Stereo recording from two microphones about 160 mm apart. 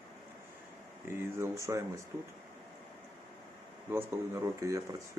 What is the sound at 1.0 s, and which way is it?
Speech, 15° right (ahead or behind).